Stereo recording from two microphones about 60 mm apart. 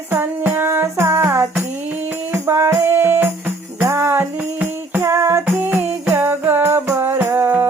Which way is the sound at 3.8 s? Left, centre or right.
Right.